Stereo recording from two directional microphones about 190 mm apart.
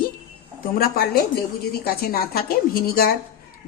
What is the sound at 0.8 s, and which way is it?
A woman's voice, 50° left (ahead or behind).